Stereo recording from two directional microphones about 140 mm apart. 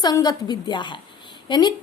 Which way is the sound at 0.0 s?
30° left (ahead or behind).